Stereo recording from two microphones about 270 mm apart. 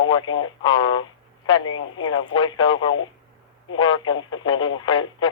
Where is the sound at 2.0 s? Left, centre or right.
Centre.